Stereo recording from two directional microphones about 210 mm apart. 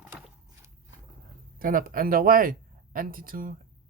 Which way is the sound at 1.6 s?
40° right (ahead or behind).